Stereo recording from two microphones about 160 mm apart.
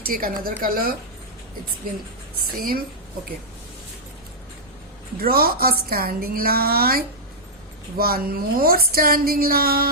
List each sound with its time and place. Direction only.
0.0 s a woman's voice: 65° right (ahead or behind)
2.6 s a woman's voice: 65° right (ahead or behind)
5.2 s a woman's voice: 70° right (ahead or behind)